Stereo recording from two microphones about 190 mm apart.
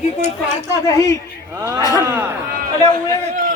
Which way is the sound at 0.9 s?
20° left (ahead or behind).